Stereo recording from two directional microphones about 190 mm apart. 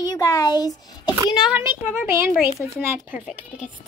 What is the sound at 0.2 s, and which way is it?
Speech, 20° left (ahead or behind).